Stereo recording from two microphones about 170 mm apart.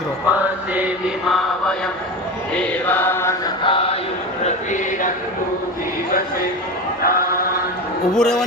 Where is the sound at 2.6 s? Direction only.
10° left (ahead or behind).